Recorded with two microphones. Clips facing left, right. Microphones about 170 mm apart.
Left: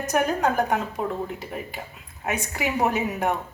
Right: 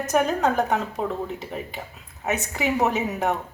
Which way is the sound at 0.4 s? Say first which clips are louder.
Right 1 dB; 25° right (ahead or behind).